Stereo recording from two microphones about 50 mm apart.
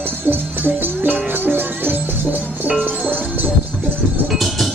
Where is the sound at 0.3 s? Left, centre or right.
Right.